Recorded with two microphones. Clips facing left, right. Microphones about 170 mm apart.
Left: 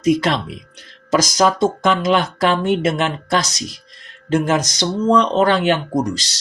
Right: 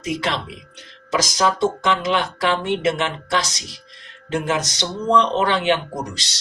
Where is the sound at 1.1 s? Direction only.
45° left (ahead or behind).